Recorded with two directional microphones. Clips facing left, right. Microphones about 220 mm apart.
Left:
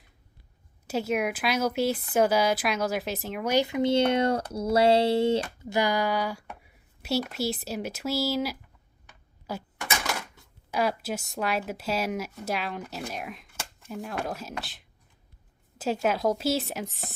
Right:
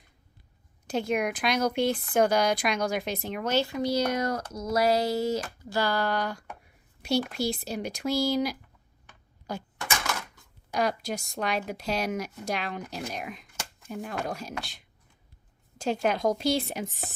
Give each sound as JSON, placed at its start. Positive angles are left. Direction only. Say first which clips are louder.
{"t": 0.9, "sound": "speech", "louder": "even", "side_deg": 5}
{"t": 3.5, "sound": "speech", "louder": "left 4 dB", "side_deg": 20}
{"t": 10.7, "sound": "speech", "louder": "left 1 dB", "side_deg": 5}